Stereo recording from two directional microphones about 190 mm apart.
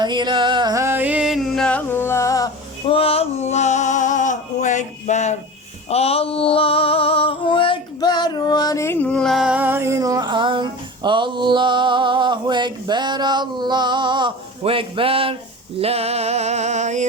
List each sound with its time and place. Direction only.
0.0 s music: 25° right (ahead or behind); by 2.5 s 15° left (ahead or behind)
2.8 s male singing: 30° left (ahead or behind)
5.9 s a sound: 35° left (ahead or behind); by 17.1 s 40° right (ahead or behind)